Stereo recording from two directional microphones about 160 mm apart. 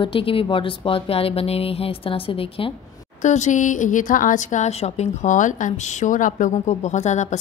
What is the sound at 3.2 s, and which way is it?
Speech, 50° left (ahead or behind).